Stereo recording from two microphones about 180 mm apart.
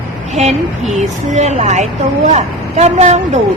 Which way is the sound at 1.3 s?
40° right (ahead or behind).